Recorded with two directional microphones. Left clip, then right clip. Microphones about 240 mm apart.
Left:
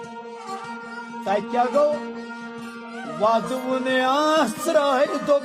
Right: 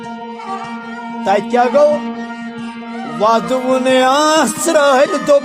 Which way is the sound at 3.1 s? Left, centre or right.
Right.